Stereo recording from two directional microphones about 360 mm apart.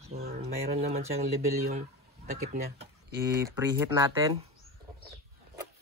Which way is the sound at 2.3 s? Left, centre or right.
Centre.